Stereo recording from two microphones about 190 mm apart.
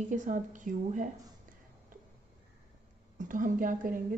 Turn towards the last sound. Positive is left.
turn(degrees=-45)  # may be behind; listen again after turning